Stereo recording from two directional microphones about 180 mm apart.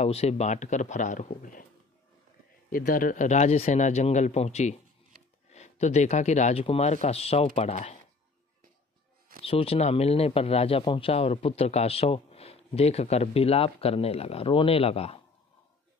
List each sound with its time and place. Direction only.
0.0 s speech: 35° left (ahead or behind)
2.7 s speech: 50° left (ahead or behind)
9.4 s speech: 30° left (ahead or behind)